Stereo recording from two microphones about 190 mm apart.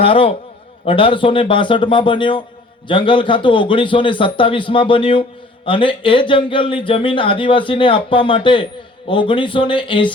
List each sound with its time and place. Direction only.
0.0 s a man's voice: 30° left (ahead or behind)